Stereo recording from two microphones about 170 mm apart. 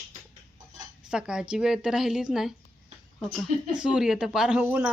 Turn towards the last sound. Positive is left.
turn(degrees=-10)  # may be behind; listen again after turning